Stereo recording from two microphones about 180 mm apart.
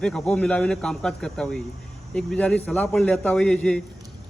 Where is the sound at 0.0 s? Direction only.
5° left (ahead or behind).